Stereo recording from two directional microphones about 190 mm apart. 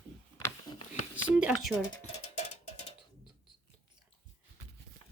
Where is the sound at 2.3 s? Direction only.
35° left (ahead or behind).